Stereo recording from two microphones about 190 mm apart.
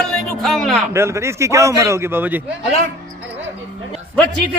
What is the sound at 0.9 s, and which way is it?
A man's voice, 15° right (ahead or behind).